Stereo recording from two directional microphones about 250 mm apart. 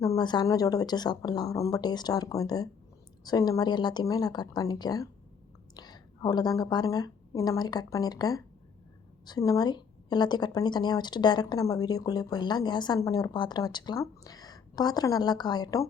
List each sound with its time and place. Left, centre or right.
0.0 s a woman's voice: centre